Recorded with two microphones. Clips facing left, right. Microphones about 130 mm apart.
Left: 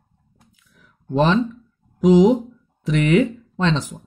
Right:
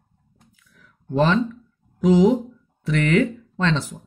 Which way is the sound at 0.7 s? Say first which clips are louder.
Left 2 dB; 20° left (ahead or behind).